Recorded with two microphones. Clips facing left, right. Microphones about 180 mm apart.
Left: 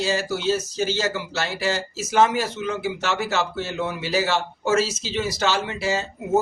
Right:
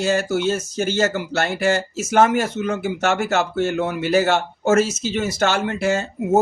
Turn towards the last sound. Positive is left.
turn(degrees=-50)  # may be behind; listen again after turning